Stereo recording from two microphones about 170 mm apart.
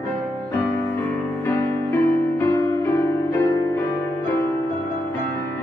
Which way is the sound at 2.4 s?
15° left (ahead or behind).